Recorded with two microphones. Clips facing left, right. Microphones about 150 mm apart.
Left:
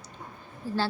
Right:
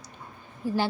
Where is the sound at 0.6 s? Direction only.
15° right (ahead or behind).